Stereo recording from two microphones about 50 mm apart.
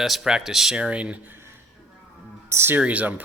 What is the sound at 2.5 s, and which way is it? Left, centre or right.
Speech, right.